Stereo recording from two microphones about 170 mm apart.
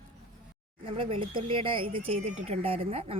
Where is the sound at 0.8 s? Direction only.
30° right (ahead or behind).